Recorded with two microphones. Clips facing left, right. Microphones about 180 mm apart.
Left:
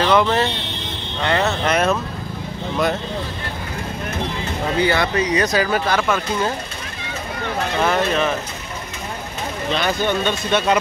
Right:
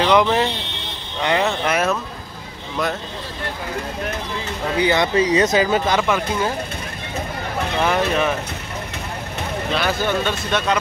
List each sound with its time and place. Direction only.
0.0 s speech: 15° right (ahead or behind)
4.7 s speech: 20° right (ahead or behind)
7.8 s speech: 10° right (ahead or behind)
9.7 s speech: 5° right (ahead or behind)